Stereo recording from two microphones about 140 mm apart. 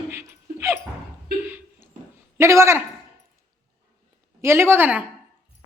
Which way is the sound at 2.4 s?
20° right (ahead or behind).